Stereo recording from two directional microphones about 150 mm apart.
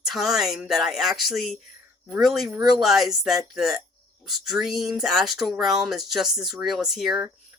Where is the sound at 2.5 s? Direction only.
25° right (ahead or behind).